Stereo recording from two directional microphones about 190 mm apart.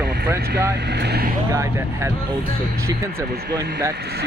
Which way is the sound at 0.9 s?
60° right (ahead or behind).